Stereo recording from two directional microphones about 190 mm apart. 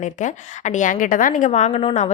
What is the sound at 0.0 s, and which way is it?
A woman's voice, 40° left (ahead or behind).